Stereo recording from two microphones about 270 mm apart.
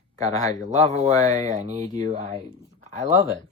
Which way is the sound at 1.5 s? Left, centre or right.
Right.